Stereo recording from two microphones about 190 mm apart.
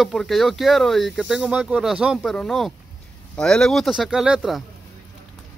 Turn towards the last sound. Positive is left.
turn(degrees=0)  # may be behind; listen again after turning